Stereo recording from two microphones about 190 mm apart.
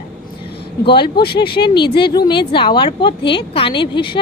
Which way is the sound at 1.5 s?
25° left (ahead or behind).